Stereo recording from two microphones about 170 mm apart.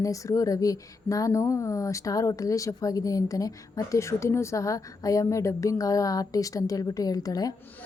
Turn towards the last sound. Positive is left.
turn(degrees=20)  # may be behind; listen again after turning